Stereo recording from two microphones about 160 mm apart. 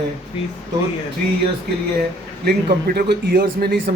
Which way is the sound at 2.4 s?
80° right.